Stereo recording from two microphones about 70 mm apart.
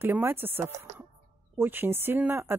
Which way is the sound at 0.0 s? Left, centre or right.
Right.